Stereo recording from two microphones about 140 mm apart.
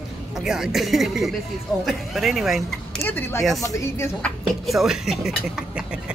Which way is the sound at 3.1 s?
15° left (ahead or behind).